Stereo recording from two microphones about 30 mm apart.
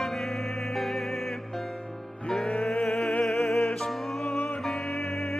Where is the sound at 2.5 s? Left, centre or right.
Centre.